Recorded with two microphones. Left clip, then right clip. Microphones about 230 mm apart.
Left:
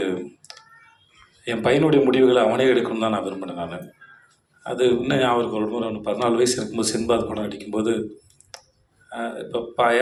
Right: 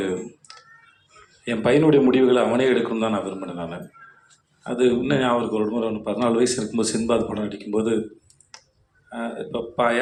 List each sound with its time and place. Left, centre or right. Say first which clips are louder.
0.5 s a sound: left 1 dB; left
1.5 s a man's voice: right 1 dB; left
8.5 s tick: left 3 dB; left
9.0 s a man's voice: left 1 dB; left